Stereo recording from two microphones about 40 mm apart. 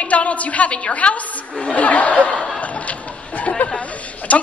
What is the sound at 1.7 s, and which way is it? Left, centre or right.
Speech, left.